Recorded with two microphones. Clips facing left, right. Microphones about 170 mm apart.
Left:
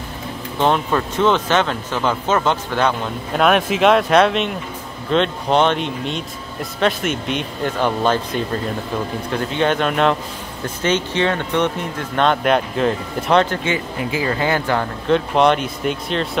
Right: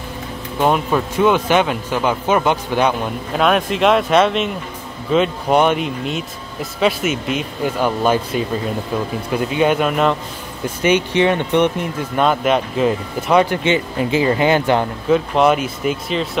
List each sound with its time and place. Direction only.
0.6 s speech: 10° right (ahead or behind)
3.3 s speech: centre (ahead or behind)
13.7 s speech: 20° right (ahead or behind)
15.0 s speech: 5° right (ahead or behind)